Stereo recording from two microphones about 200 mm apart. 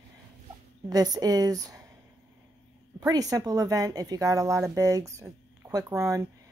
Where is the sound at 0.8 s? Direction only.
20° right (ahead or behind).